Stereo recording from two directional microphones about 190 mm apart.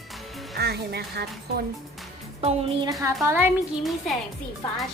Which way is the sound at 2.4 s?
35° right (ahead or behind).